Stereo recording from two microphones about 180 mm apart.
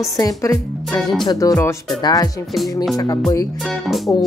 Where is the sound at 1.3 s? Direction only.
20° left (ahead or behind).